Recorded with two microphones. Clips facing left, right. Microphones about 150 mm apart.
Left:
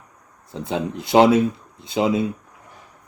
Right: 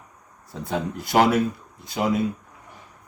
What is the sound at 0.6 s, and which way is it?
Speech, 20° left (ahead or behind).